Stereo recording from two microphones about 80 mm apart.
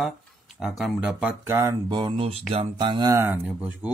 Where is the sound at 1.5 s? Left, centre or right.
Right.